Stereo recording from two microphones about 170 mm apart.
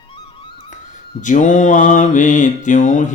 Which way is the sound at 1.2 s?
50° left (ahead or behind).